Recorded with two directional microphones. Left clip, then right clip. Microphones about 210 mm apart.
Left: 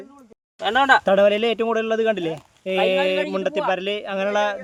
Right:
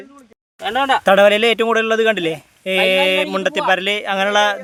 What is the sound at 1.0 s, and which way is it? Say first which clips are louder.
Speech: right 5 dB; 5° right (ahead or behind).